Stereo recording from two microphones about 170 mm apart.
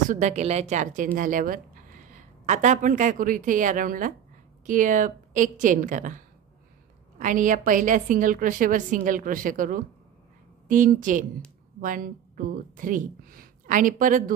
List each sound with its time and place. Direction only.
0.1 s a woman's voice: 40° right (ahead or behind)